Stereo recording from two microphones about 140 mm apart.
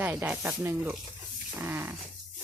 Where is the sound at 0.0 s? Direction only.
10° right (ahead or behind).